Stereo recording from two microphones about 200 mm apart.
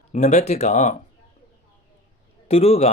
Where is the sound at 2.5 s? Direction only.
30° left (ahead or behind).